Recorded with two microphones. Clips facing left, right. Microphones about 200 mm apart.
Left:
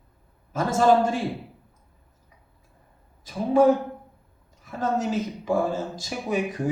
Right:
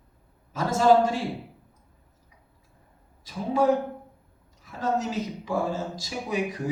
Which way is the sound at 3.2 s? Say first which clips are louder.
Left 5 dB; 50° left (ahead or behind).